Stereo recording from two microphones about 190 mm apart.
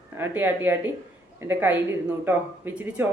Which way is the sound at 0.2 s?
10° right (ahead or behind).